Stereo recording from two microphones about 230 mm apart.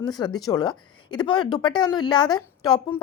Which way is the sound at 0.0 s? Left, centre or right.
Centre.